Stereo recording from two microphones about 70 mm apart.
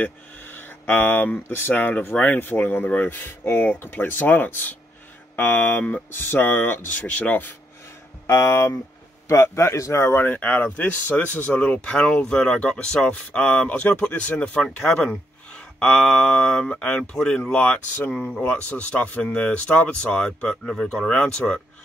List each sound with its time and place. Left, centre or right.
0.0 s speech: left
8.3 s speech: left; by 21.5 s centre